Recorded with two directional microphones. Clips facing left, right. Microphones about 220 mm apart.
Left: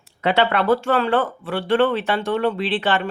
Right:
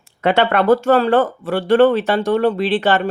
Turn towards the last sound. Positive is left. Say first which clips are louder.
# right 5 dB
turn(degrees=-40)  # may be behind; listen again after turning